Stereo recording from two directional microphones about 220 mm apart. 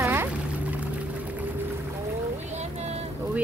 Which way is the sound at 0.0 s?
10° right (ahead or behind).